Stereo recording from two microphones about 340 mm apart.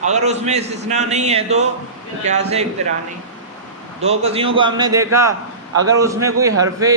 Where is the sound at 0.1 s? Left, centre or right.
Centre.